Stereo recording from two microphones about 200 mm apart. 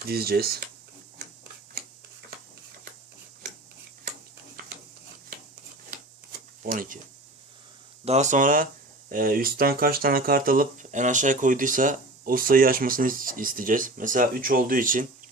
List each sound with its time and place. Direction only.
0.0 s speech: 50° right (ahead or behind)
6.6 s speech: 40° right (ahead or behind)
8.0 s speech: 35° right (ahead or behind)